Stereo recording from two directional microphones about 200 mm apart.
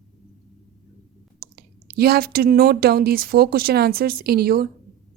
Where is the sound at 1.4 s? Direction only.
50° right (ahead or behind).